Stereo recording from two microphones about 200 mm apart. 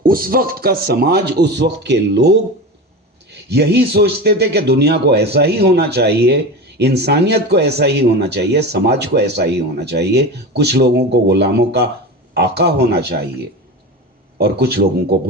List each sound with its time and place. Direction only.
0.0 s a man's voice: 45° right (ahead or behind)
14.3 s speech: 55° right (ahead or behind)